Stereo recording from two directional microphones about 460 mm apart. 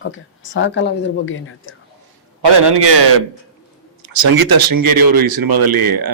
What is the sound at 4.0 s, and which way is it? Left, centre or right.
A man's voice, right.